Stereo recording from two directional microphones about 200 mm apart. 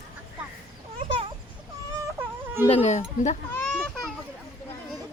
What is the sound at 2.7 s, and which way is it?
Speech, 35° left (ahead or behind).